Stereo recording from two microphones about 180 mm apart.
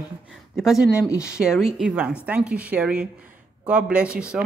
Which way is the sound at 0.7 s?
20° left (ahead or behind).